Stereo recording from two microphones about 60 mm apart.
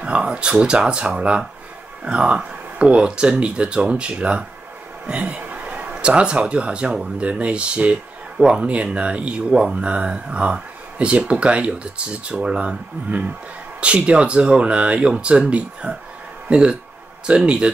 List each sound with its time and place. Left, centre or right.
0.0 s a man's voice: centre